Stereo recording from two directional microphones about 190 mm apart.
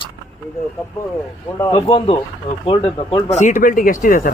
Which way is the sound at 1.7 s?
25° left (ahead or behind).